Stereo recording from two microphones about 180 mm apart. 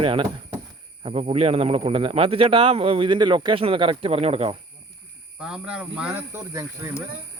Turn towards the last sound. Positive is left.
turn(degrees=-15)  # may be behind; listen again after turning